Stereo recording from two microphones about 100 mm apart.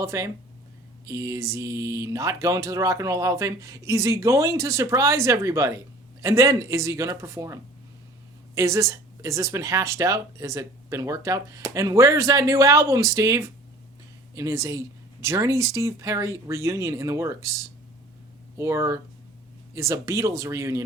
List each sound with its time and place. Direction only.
0.0 s speech: 30° right (ahead or behind)